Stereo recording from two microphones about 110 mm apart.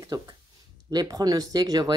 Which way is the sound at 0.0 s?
35° right (ahead or behind).